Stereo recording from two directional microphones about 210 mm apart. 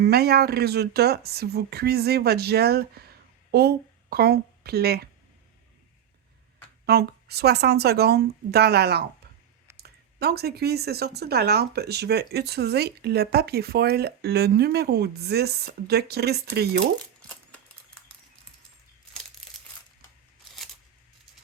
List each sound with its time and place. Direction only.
0.0 s speech: 50° right (ahead or behind)
6.8 s speech: 50° right (ahead or behind)
17.2 s a sound: 5° left (ahead or behind)